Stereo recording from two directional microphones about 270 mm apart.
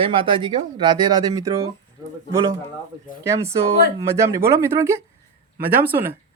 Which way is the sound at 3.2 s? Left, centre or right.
Centre.